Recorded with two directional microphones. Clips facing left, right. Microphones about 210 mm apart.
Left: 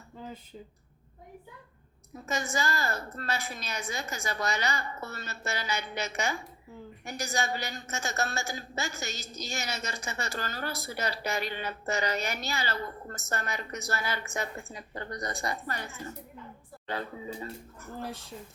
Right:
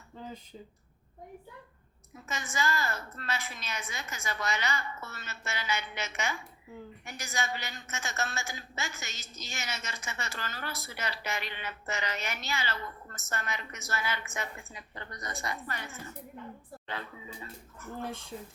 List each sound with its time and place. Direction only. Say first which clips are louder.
2.1 s a woman's voice: left 4 dB; 35° left (ahead or behind)